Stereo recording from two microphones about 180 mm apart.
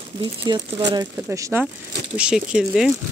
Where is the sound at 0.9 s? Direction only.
15° right (ahead or behind).